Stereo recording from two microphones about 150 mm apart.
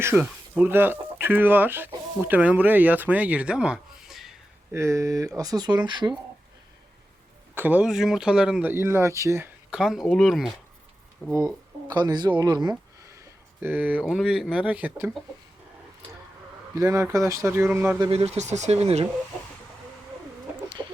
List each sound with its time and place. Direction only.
0.0 s speech: 10° right (ahead or behind)
4.7 s speech: 20° right (ahead or behind)
7.5 s speech: 10° right (ahead or behind)
9.6 s speech: 5° right (ahead or behind)
11.2 s speech: 15° left (ahead or behind)
11.9 s speech: 30° right (ahead or behind)
13.6 s speech: 10° right (ahead or behind)
16.7 s speech: 20° right (ahead or behind)
18.1 s speech: 45° right (ahead or behind)